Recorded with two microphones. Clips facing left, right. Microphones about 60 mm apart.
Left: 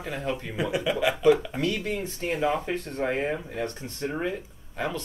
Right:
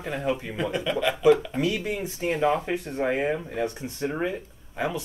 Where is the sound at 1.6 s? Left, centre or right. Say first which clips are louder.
Right 1 dB; centre.